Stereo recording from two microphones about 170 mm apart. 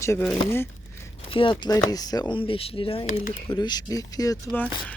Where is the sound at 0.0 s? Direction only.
15° left (ahead or behind).